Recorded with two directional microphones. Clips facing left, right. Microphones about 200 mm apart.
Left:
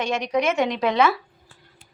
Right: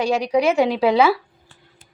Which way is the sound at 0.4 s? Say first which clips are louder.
Right 5 dB; 35° right (ahead or behind).